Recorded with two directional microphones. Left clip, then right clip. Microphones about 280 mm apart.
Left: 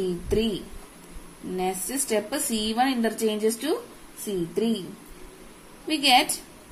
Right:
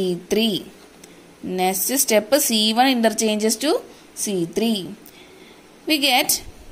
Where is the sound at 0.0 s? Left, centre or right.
Right.